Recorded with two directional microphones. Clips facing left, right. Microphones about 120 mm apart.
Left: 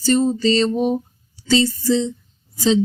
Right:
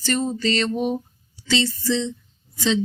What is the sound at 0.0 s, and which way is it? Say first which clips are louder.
Music: left 7 dB; 30° left (ahead or behind).